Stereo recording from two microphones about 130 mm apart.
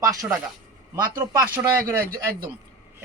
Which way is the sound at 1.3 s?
25° right (ahead or behind).